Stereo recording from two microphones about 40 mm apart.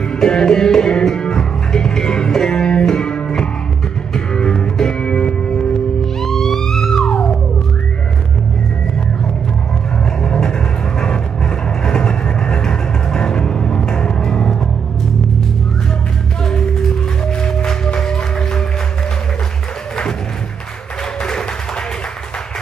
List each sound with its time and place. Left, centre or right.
0.0 s music: centre
6.2 s theremin: centre
10.2 s music: centre
16.4 s music: centre
21.2 s music: centre